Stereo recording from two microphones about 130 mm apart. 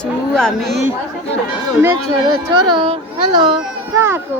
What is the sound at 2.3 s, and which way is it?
A woman's voice, 35° right (ahead or behind).